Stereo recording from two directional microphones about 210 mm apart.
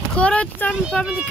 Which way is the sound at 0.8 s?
5° right (ahead or behind).